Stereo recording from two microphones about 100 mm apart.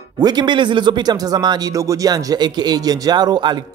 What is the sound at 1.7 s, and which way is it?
Speech, 35° right (ahead or behind).